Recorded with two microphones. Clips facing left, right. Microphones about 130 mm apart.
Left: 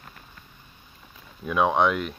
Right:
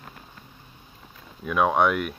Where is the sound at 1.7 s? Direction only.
10° right (ahead or behind).